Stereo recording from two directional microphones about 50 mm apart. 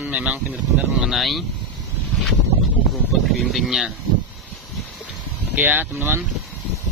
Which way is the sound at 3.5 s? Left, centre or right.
Centre.